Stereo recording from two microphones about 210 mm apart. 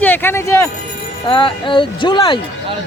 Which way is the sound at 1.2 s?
25° left (ahead or behind).